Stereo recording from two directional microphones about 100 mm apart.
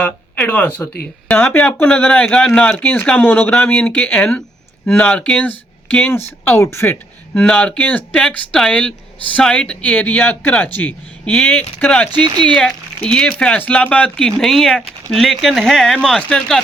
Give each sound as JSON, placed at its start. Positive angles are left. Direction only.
{"t": 0.0, "sound": "speech", "side_deg": 15}
{"t": 7.4, "sound": "speech", "side_deg": 10}